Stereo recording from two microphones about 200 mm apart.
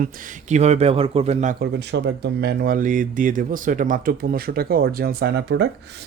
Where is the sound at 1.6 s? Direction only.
55° right (ahead or behind).